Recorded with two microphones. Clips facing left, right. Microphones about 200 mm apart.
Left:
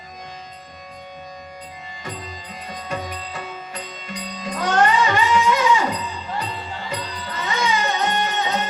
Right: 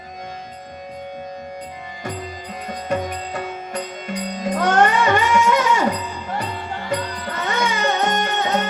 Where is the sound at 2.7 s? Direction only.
50° right (ahead or behind).